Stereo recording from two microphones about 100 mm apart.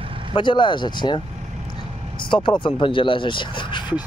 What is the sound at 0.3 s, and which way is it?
Speech, 50° left (ahead or behind).